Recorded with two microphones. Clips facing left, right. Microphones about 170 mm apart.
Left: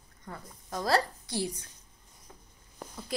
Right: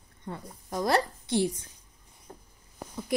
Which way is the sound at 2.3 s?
40° right (ahead or behind).